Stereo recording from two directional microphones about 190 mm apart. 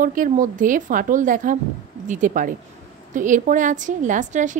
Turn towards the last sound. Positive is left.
turn(degrees=-40)  # may be behind; listen again after turning